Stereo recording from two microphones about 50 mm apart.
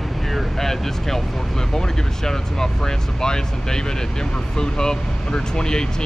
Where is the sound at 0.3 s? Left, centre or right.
Centre.